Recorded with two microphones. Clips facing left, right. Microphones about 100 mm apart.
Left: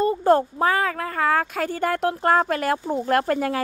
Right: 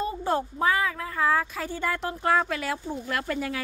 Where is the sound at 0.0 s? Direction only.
50° left (ahead or behind).